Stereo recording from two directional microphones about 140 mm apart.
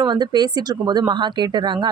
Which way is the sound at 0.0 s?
30° right (ahead or behind).